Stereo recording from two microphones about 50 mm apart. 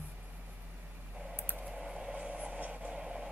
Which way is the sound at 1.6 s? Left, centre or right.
Centre.